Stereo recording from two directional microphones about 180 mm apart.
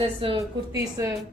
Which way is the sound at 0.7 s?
15° right (ahead or behind).